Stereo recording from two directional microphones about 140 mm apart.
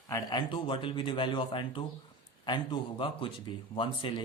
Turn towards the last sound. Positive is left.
turn(degrees=40)  # may be behind; listen again after turning